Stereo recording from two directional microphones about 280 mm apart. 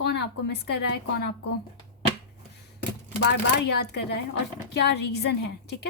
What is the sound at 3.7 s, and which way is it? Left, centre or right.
A woman's voice, left.